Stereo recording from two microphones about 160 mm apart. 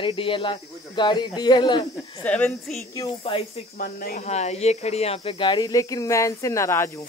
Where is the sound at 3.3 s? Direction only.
35° left (ahead or behind).